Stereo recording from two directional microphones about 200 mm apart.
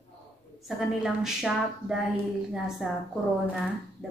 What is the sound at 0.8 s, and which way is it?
Speech, centre (ahead or behind).